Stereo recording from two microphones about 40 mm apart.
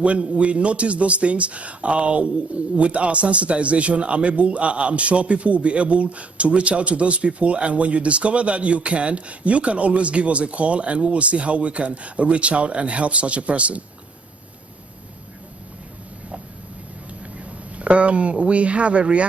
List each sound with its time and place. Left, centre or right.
0.0 s speech: right
17.5 s speech: right